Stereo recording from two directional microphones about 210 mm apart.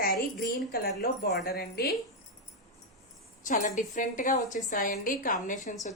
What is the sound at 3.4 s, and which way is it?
A woman's voice, 35° left (ahead or behind).